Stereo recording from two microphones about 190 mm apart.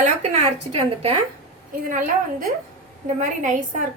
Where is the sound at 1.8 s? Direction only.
45° right (ahead or behind).